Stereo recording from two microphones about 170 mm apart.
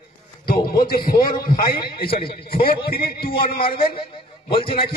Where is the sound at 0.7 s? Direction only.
60° left (ahead or behind).